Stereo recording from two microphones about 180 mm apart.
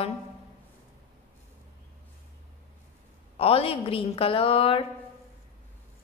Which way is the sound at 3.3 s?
30° left (ahead or behind).